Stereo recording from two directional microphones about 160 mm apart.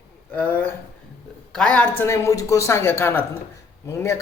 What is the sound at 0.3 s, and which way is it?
A woman's voice, 10° left (ahead or behind).